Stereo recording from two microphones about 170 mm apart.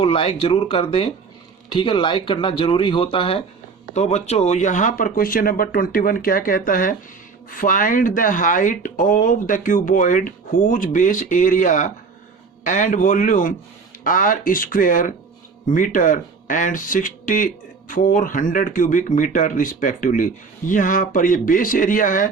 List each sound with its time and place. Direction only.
0.0 s speech: 35° left (ahead or behind); by 22.3 s 50° left (ahead or behind)